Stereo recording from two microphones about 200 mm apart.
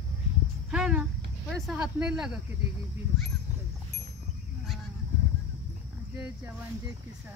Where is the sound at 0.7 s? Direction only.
5° right (ahead or behind).